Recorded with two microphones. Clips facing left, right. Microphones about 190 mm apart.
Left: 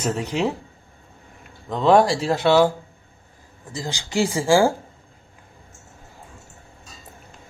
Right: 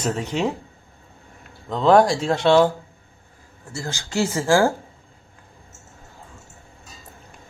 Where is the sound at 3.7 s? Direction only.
15° left (ahead or behind).